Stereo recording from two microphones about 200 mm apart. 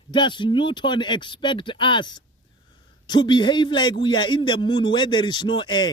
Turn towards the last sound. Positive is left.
turn(degrees=20)  # may be behind; listen again after turning